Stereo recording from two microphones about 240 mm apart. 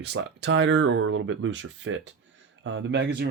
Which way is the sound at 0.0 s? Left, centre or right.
Right.